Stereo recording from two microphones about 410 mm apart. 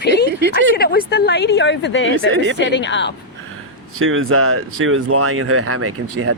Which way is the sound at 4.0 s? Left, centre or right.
Right.